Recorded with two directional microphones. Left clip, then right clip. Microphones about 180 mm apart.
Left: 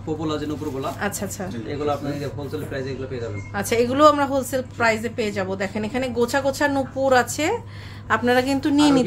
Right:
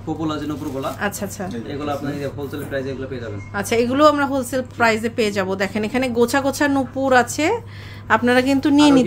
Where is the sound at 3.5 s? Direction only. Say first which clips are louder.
Right 2 dB; 10° right (ahead or behind).